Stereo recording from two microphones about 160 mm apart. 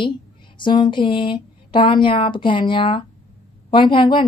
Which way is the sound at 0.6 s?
30° left (ahead or behind).